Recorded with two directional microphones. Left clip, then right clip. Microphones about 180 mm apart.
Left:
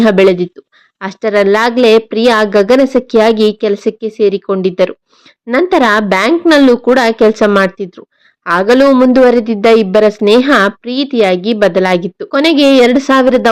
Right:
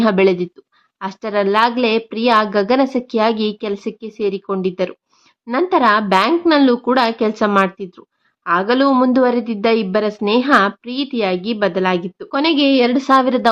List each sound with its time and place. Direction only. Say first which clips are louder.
0.0 s speech: left 6 dB; 20° left (ahead or behind)